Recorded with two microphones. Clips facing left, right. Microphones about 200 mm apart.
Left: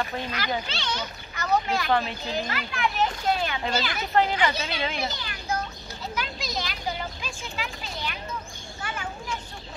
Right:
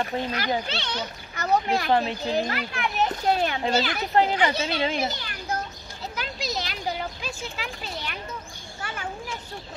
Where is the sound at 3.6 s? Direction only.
35° right (ahead or behind).